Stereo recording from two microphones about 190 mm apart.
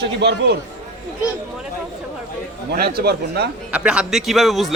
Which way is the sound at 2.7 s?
55° right (ahead or behind).